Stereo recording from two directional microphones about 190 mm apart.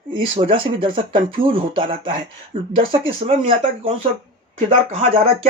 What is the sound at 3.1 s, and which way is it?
Speech, 35° right (ahead or behind).